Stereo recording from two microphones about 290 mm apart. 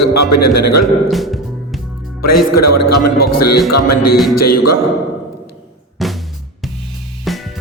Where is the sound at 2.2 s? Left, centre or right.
Left.